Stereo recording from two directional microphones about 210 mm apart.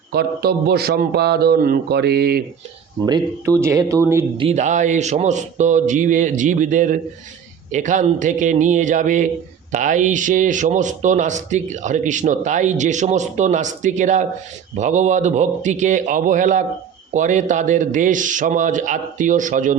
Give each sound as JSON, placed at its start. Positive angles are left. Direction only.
{"t": 0.1, "sound": "a man's voice", "side_deg": -50}
{"t": 3.6, "sound": "speech", "side_deg": -15}
{"t": 4.4, "sound": "speech", "side_deg": -30}